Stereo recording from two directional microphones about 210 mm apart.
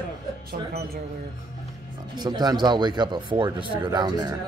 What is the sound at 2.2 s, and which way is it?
Speech, 20° right (ahead or behind).